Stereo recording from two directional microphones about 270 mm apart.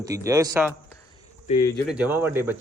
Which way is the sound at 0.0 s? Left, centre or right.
Centre.